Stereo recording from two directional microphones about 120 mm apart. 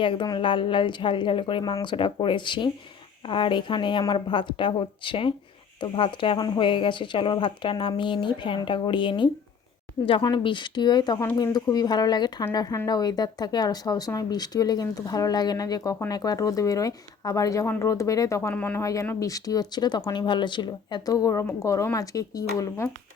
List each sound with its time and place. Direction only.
0.0 s speech: 40° left (ahead or behind); by 18.5 s 25° left (ahead or behind)
18.5 s speech: 15° left (ahead or behind)
18.8 s speech: 25° left (ahead or behind)